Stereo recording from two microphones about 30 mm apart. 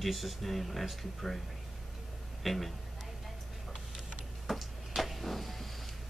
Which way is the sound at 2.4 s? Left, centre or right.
Centre.